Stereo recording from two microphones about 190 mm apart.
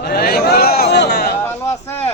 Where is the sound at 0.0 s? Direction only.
55° left (ahead or behind).